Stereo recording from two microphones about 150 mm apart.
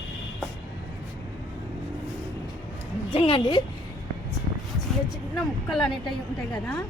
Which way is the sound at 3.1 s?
35° left (ahead or behind).